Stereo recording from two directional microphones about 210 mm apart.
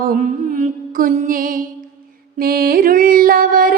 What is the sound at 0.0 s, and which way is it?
Music, 40° right (ahead or behind).